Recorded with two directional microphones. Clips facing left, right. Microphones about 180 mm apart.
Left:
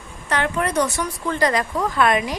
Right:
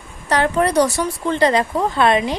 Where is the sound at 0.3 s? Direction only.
35° right (ahead or behind).